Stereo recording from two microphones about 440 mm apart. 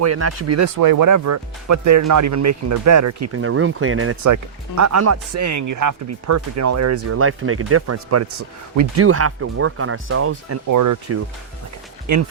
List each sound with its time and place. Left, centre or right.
0.0 s speech: right
0.8 s speech: right
10.7 s speech: right